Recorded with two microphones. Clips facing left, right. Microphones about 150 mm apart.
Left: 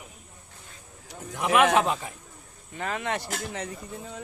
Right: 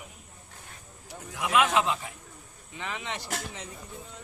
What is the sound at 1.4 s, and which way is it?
Speech, 75° left (ahead or behind).